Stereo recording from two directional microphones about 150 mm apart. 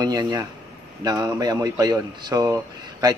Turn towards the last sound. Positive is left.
turn(degrees=-20)  # may be behind; listen again after turning